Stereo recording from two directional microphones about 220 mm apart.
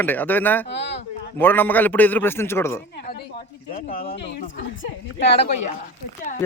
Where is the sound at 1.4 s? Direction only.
10° left (ahead or behind).